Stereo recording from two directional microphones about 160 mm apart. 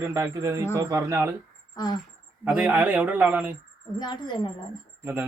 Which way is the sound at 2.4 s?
10° right (ahead or behind).